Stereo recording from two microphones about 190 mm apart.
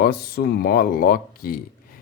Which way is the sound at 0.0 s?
55° left (ahead or behind).